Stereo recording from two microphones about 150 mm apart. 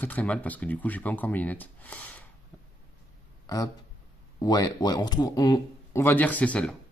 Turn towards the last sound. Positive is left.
turn(degrees=10)  # may be behind; listen again after turning